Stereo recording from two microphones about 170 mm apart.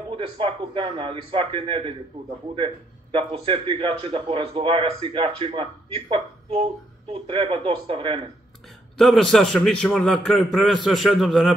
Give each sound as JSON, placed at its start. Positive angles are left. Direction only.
{"t": 0.1, "sound": "a man's voice", "side_deg": -30}
{"t": 8.9, "sound": "a man's voice", "side_deg": 0}